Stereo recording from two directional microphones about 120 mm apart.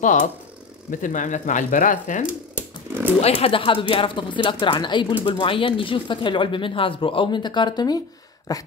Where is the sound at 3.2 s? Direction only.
50° left (ahead or behind).